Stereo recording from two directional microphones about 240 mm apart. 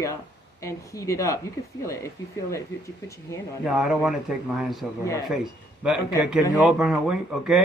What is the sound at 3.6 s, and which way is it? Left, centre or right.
Speech, centre.